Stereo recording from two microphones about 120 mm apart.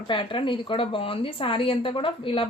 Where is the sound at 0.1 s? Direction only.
45° left (ahead or behind).